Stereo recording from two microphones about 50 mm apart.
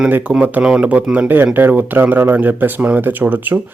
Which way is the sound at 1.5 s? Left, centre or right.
Right.